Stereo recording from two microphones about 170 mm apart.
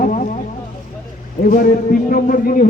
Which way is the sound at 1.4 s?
55° left (ahead or behind).